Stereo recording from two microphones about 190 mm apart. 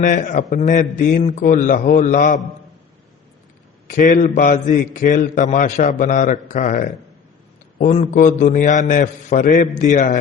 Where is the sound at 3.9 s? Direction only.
40° left (ahead or behind).